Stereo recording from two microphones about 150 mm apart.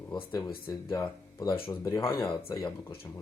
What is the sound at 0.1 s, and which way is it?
Speech, 25° left (ahead or behind).